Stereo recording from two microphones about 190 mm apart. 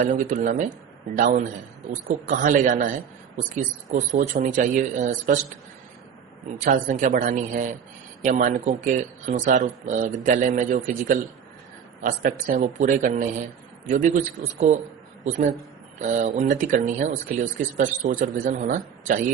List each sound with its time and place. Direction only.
0.0 s speech: 40° right (ahead or behind)
6.7 s speech: 45° right (ahead or behind)
15.2 s speech: 35° right (ahead or behind)